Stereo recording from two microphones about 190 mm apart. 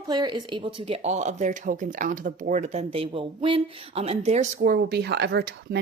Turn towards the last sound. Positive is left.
turn(degrees=-60)  # may be behind; listen again after turning